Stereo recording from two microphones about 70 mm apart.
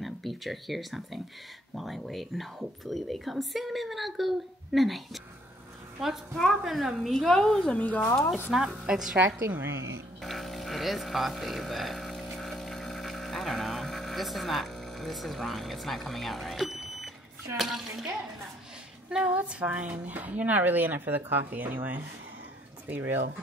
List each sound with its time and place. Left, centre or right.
0.0 s a woman's voice: centre
7.7 s speech: left
8.5 s a woman's voice: centre
10.2 s a sound: centre
17.6 s a woman's voice: centre
19.0 s speech: centre